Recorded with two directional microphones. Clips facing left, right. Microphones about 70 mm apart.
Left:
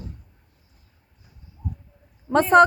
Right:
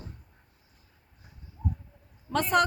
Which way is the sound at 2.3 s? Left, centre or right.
Left.